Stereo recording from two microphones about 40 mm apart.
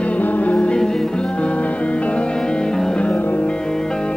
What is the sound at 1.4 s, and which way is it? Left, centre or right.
Music, left.